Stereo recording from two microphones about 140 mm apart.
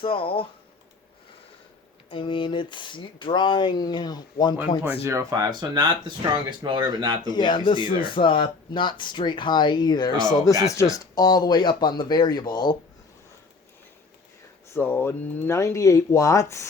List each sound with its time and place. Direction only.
0.0 s speech: 40° left (ahead or behind)
2.0 s speech: 35° left (ahead or behind)
5.0 s speech: 25° right (ahead or behind)
7.3 s speech: 30° left (ahead or behind)
14.7 s speech: 15° left (ahead or behind)